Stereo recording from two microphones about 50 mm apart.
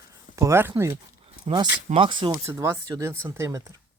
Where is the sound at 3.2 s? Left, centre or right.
Right.